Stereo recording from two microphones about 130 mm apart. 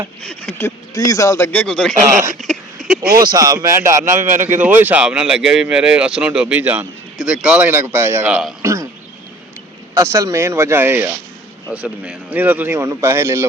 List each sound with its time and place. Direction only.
0.2 s speech: 10° left (ahead or behind)
0.9 s a man's voice: 25° left (ahead or behind)
1.5 s speech: 10° left (ahead or behind)
2.4 s a sound: centre (ahead or behind)
3.2 s speech: 30° right (ahead or behind); by 8.5 s 10° right (ahead or behind)
8.6 s frog: 20° right (ahead or behind)
9.9 s speech: 25° right (ahead or behind)